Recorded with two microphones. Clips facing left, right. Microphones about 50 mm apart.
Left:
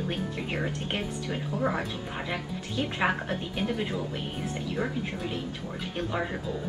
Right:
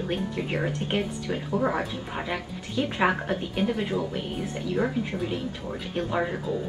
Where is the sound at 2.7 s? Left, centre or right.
Right.